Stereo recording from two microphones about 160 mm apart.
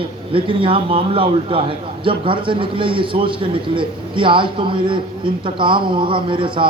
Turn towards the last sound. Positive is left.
turn(degrees=-30)  # may be behind; listen again after turning